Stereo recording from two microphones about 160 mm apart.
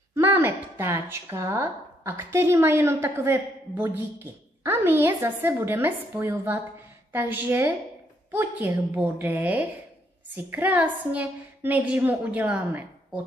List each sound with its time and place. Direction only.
0.1 s speech: 15° right (ahead or behind)